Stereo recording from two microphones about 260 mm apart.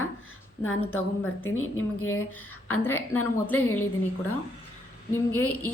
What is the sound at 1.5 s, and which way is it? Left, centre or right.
Speech, left.